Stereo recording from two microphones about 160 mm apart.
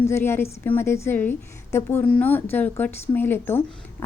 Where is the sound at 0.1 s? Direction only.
15° left (ahead or behind).